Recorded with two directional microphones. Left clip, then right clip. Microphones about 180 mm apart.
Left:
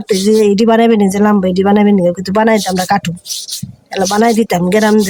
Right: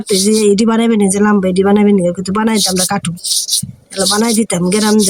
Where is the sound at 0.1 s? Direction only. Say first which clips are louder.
Left 1 dB; 15° left (ahead or behind).